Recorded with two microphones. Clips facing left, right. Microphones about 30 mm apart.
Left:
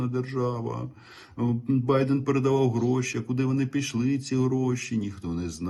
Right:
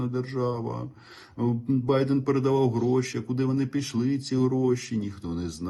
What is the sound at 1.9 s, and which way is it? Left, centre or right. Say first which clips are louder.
Speech: even; right.